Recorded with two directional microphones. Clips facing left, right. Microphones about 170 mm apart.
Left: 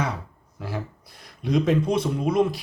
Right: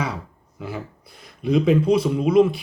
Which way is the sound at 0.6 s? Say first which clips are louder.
Right 1 dB; centre (ahead or behind).